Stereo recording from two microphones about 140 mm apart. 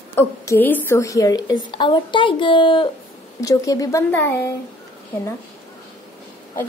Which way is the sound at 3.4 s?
25° left (ahead or behind).